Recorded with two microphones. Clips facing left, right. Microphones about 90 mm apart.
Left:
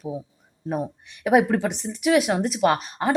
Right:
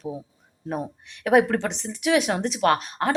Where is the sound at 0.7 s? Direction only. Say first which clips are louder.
Left 2 dB; 5° left (ahead or behind).